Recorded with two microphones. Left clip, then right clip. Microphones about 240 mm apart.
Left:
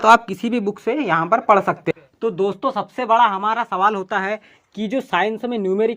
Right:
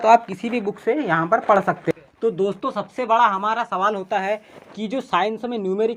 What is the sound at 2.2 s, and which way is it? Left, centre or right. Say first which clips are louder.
Speech: left 1 dB; left.